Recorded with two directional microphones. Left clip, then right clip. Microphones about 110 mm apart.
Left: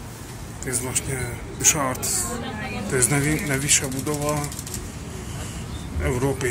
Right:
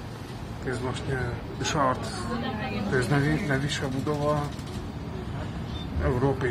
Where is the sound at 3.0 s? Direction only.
35° left (ahead or behind).